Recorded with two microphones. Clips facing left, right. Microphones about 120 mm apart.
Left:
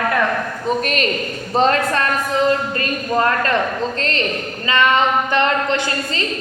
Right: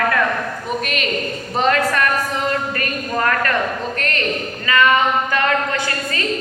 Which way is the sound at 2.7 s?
25° left (ahead or behind).